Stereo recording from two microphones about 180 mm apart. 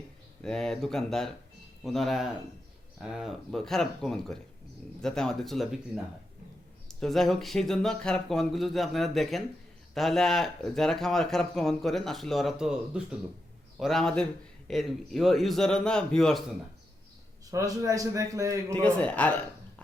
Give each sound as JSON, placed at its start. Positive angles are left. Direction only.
{"t": 0.4, "sound": "speech", "side_deg": 5}
{"t": 7.0, "sound": "speech", "side_deg": 0}
{"t": 17.5, "sound": "a man's voice", "side_deg": -20}
{"t": 18.7, "sound": "a man's voice", "side_deg": 5}